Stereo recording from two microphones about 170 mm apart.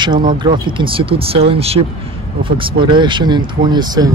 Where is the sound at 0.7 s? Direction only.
30° right (ahead or behind).